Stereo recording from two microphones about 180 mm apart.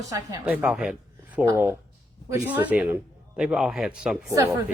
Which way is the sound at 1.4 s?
15° right (ahead or behind).